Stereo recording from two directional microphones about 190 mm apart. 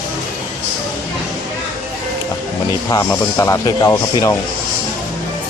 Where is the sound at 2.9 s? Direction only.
15° left (ahead or behind).